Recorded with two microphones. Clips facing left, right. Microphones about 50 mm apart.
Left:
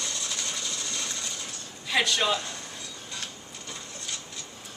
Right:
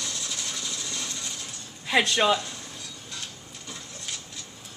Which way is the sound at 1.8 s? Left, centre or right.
Right.